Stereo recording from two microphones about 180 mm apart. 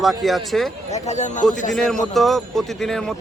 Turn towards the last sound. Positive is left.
turn(degrees=0)  # may be behind; listen again after turning